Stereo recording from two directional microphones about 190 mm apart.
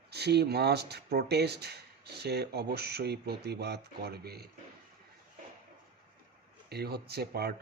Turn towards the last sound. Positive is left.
turn(degrees=-55)  # may be behind; listen again after turning